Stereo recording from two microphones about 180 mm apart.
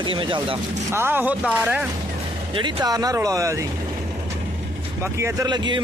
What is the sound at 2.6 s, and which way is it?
A man's voice, 25° right (ahead or behind).